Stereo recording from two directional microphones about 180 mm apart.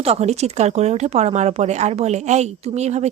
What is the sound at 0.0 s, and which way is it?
Speech, 35° right (ahead or behind).